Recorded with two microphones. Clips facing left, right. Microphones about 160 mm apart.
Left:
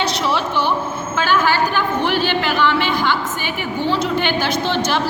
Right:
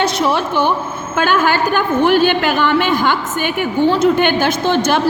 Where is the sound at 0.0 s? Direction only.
50° right (ahead or behind).